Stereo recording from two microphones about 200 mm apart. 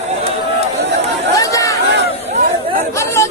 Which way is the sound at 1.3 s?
15° left (ahead or behind).